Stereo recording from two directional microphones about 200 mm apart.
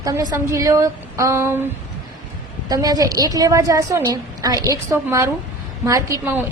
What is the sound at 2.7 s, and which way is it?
A woman's voice, 20° right (ahead or behind).